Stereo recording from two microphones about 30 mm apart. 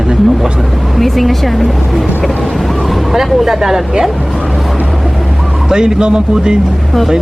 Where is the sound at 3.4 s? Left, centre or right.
Centre.